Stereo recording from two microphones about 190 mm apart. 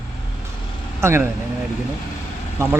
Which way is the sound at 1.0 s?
15° right (ahead or behind).